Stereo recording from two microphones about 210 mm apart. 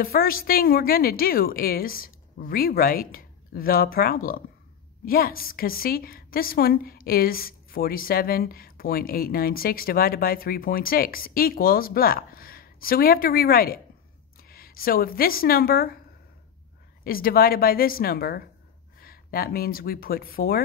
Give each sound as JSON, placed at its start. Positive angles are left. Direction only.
{"t": 0.0, "sound": "a woman's voice", "side_deg": 45}
{"t": 17.0, "sound": "a woman's voice", "side_deg": 45}